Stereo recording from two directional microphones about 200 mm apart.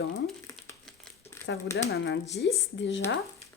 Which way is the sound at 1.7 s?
55° left (ahead or behind).